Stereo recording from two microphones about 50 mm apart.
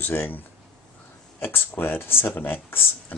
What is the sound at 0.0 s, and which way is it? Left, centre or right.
Speech, left.